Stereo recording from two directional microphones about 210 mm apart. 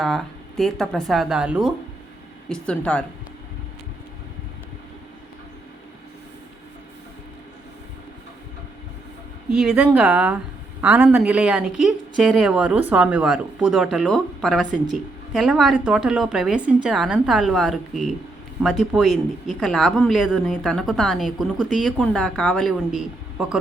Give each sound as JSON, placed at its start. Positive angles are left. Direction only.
{"t": 0.0, "sound": "a woman's voice", "side_deg": 0}
{"t": 9.5, "sound": "a woman's voice", "side_deg": -5}